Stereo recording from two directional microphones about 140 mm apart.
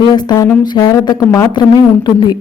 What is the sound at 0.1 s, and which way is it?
A woman's voice, 30° left (ahead or behind).